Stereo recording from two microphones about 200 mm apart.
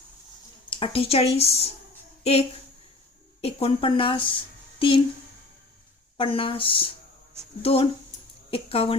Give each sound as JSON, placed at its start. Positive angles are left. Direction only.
{"t": 0.7, "sound": "speech", "side_deg": 25}
{"t": 3.4, "sound": "a woman's voice", "side_deg": 25}
{"t": 6.1, "sound": "speech", "side_deg": 25}